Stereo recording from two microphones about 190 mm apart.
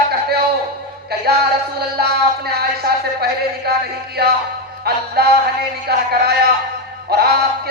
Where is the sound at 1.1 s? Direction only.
55° right (ahead or behind).